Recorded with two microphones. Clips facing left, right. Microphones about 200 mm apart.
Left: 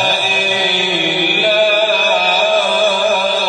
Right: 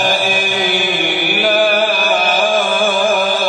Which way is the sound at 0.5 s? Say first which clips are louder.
Right 1 dB; 45° right (ahead or behind).